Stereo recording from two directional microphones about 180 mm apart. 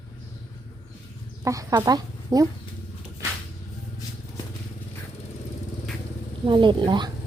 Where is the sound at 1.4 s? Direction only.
20° right (ahead or behind).